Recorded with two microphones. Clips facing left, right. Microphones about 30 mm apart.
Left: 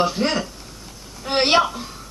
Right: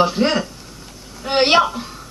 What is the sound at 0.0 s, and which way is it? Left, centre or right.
A woman's voice, centre.